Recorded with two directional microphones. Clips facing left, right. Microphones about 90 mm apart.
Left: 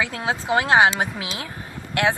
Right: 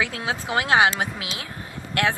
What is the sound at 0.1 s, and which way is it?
A woman's voice, 35° left (ahead or behind).